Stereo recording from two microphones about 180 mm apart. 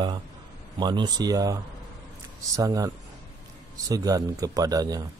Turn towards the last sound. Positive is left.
turn(degrees=-20)  # may be behind; listen again after turning